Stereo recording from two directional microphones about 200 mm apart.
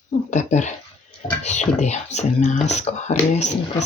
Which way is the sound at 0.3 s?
35° left (ahead or behind).